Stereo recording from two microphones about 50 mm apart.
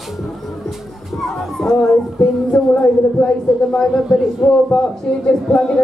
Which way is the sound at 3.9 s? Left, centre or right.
Centre.